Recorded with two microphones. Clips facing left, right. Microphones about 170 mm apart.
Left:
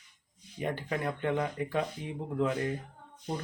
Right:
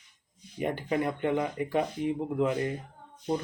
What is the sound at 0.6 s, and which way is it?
Speech, 15° right (ahead or behind).